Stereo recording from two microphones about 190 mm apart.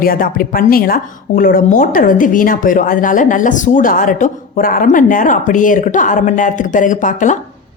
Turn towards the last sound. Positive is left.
turn(degrees=40)  # may be behind; listen again after turning